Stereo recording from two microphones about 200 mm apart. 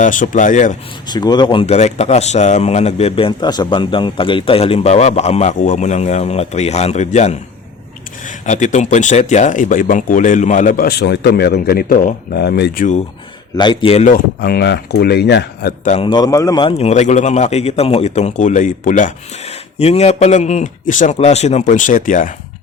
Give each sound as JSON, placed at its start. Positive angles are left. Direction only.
{"t": 0.0, "sound": "speech", "side_deg": 40}
{"t": 1.0, "sound": "speech", "side_deg": 20}
{"t": 13.6, "sound": "a man's voice", "side_deg": 25}
{"t": 14.4, "sound": "speech", "side_deg": 55}
{"t": 15.8, "sound": "speech", "side_deg": 40}
{"t": 16.0, "sound": "speech", "side_deg": 20}